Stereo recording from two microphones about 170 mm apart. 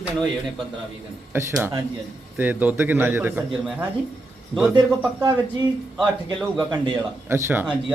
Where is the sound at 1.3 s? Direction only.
15° right (ahead or behind).